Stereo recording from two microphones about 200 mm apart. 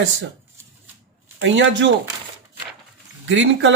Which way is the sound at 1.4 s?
70° right (ahead or behind).